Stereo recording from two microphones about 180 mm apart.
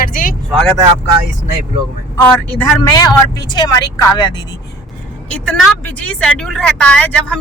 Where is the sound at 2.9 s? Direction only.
20° left (ahead or behind).